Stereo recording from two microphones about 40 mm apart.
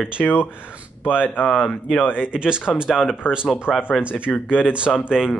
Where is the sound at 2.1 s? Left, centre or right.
Right.